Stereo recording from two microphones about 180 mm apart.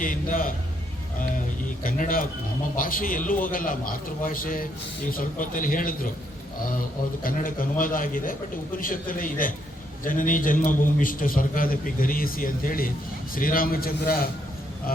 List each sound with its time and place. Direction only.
0.0 s a man's voice: 50° left (ahead or behind)
1.8 s a man's voice: 50° left (ahead or behind)
14.9 s a sound: 55° left (ahead or behind)